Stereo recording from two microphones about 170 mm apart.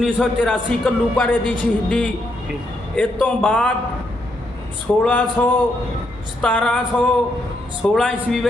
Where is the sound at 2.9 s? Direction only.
10° left (ahead or behind).